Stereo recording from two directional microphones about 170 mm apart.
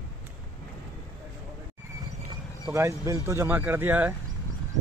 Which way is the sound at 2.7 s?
15° right (ahead or behind).